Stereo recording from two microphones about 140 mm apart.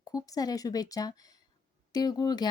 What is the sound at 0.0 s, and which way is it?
Speech, 25° left (ahead or behind).